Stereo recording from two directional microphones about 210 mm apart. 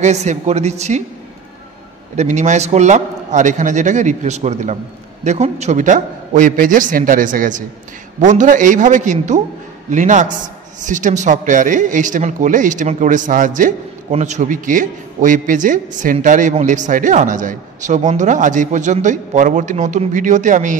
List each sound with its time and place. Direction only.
0.0 s speech: 35° right (ahead or behind)
2.1 s speech: 35° right (ahead or behind)